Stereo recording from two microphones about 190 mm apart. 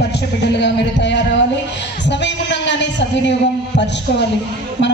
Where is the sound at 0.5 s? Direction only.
65° left (ahead or behind).